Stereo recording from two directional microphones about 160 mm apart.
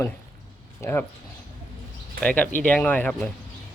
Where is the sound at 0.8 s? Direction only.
15° left (ahead or behind).